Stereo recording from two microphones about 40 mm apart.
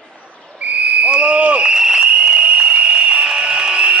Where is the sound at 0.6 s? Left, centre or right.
Right.